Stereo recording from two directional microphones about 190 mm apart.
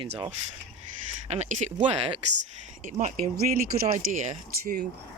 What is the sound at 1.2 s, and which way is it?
Speech, 35° right (ahead or behind).